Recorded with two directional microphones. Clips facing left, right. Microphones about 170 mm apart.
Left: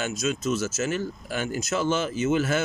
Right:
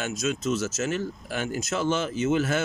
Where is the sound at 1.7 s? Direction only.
60° right (ahead or behind).